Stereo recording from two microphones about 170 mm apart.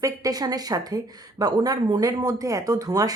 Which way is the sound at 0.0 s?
20° right (ahead or behind).